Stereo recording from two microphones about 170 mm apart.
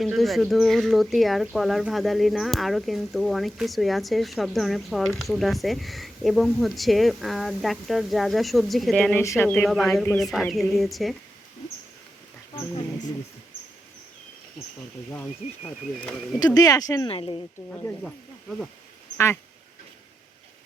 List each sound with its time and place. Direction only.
0.0 s speech: centre (ahead or behind)
16.6 s speech: 20° left (ahead or behind)
17.7 s speech: 5° left (ahead or behind)